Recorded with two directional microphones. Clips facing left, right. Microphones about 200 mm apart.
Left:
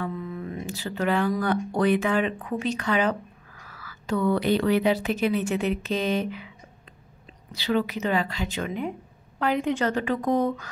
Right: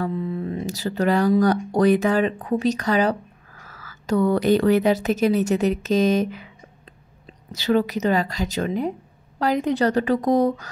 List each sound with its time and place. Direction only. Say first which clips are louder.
0.0 s mantra: right 6 dB; 30° right (ahead or behind)
1.4 s a woman's voice: right 5 dB; 40° right (ahead or behind)
7.5 s a woman's voice: right 5 dB; 40° right (ahead or behind)